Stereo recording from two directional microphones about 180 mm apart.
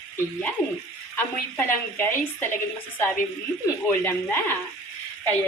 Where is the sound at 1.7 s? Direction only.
10° left (ahead or behind).